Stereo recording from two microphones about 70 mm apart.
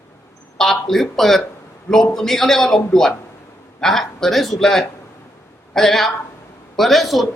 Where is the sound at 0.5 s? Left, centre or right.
Centre.